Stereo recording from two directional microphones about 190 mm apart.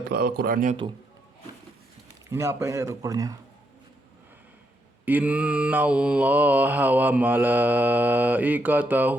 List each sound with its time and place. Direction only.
0.0 s a man's voice: 55° right (ahead or behind)
2.3 s mantra: 15° right (ahead or behind)
5.0 s mantra: 10° right (ahead or behind)